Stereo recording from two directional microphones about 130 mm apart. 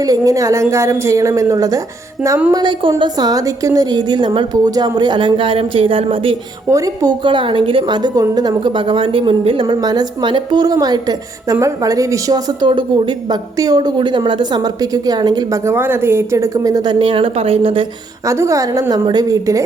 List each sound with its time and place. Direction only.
0.0 s a woman's voice: 25° right (ahead or behind); by 6.3 s 45° right (ahead or behind)
6.7 s a woman's voice: 25° right (ahead or behind); by 17.8 s 45° right (ahead or behind)
18.3 s a woman's voice: 25° right (ahead or behind)